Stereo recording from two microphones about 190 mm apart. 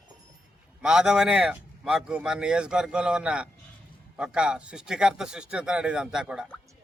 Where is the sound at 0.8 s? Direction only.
5° right (ahead or behind).